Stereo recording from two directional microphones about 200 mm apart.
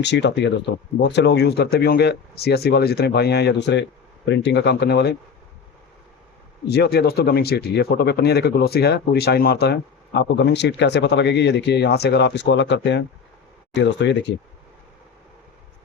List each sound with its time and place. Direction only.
0.0 s speech: 60° left (ahead or behind)
6.7 s speech: 55° left (ahead or behind)